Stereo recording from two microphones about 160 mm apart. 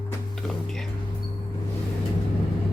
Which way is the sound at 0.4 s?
Centre (ahead or behind).